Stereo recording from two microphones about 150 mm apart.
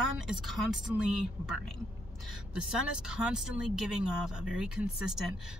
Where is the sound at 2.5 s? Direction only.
5° right (ahead or behind).